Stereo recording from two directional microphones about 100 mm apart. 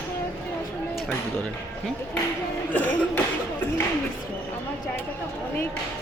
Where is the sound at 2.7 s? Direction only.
15° left (ahead or behind).